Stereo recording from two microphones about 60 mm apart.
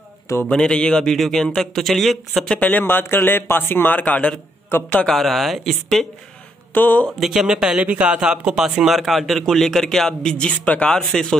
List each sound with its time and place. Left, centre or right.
0.5 s a man's voice: centre
2.5 s speech: left
2.8 s a man's voice: left
5.0 s a man's voice: centre
6.7 s speech: left
7.2 s speech: centre
7.8 s a man's voice: right; by 10.3 s centre
10.3 s speech: centre
11.0 s a man's voice: centre